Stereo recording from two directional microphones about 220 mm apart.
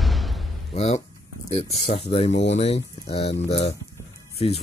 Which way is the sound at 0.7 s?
30° left (ahead or behind).